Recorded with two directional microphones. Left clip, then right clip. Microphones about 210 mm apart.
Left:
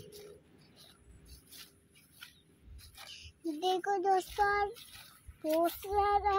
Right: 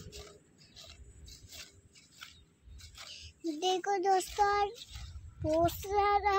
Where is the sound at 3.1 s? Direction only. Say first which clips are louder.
Right 1 dB; 5° left (ahead or behind).